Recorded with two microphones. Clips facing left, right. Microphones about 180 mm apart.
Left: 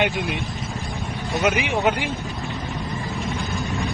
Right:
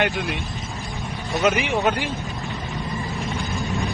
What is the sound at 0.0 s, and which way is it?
Speech, 20° left (ahead or behind).